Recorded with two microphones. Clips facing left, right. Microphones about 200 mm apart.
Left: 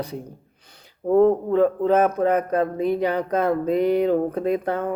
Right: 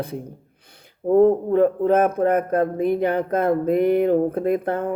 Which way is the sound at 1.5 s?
55° right (ahead or behind).